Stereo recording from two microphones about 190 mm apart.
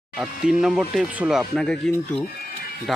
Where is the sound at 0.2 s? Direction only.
5° right (ahead or behind).